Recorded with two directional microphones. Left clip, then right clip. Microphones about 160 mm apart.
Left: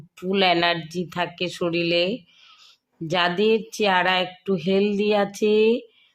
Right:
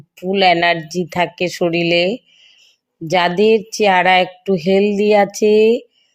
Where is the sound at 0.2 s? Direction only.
15° right (ahead or behind).